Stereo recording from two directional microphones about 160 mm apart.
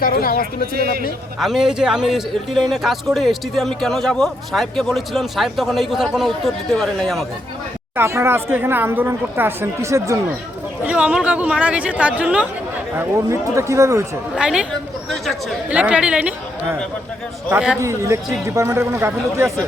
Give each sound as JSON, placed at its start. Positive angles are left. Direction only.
{"t": 0.0, "sound": "speech", "side_deg": 65}
{"t": 0.7, "sound": "a man's voice", "side_deg": -70}
{"t": 1.4, "sound": "speech", "side_deg": 0}
{"t": 7.9, "sound": "a woman's voice", "side_deg": -15}
{"t": 10.8, "sound": "a woman's voice", "side_deg": -5}
{"t": 14.3, "sound": "speech", "side_deg": -5}
{"t": 17.7, "sound": "a woman's voice", "side_deg": -20}